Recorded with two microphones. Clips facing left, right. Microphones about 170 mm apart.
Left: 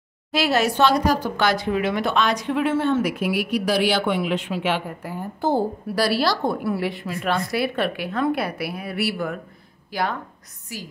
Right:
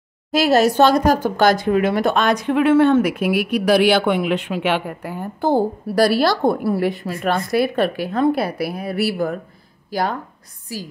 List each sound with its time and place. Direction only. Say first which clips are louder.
0.3 s speech: right 6 dB; 40° right (ahead or behind)